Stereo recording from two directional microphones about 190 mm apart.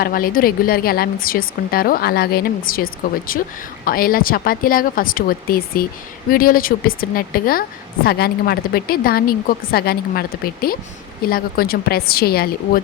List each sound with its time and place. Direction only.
0.0 s a woman's voice: 50° left (ahead or behind)